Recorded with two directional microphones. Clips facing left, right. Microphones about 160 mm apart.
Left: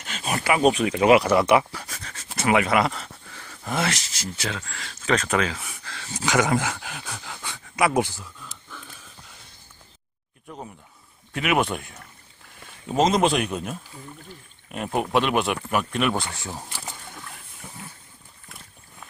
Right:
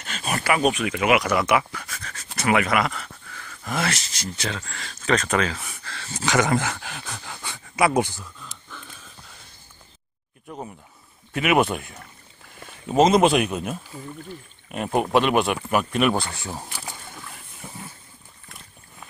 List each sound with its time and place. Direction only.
0.0 s speech: 15° left (ahead or behind)
2.3 s a sound: 25° left (ahead or behind)
4.1 s speech: 5° left (ahead or behind)
11.3 s speech: 5° right (ahead or behind)
12.8 s speech: 5° right (ahead or behind)
15.1 s speech: centre (ahead or behind)